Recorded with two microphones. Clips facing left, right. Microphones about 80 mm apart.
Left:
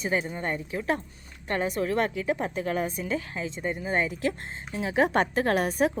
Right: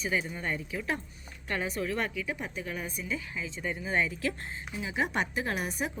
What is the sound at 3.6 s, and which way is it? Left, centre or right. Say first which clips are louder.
Speech: left 3 dB; left.